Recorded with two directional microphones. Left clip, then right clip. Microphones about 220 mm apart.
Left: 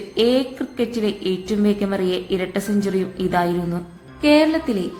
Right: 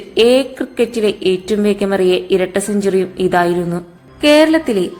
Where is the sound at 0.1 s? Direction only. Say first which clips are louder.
Right 7 dB; 30° right (ahead or behind).